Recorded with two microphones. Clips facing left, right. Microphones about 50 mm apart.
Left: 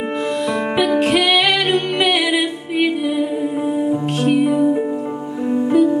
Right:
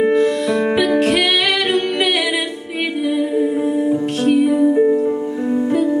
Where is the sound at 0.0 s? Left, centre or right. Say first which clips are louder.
Right 6 dB; centre.